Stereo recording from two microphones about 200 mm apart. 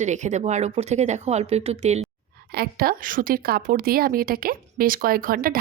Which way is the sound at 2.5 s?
50° right (ahead or behind).